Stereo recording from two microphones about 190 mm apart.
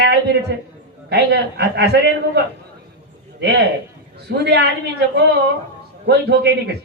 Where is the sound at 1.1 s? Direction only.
60° right (ahead or behind).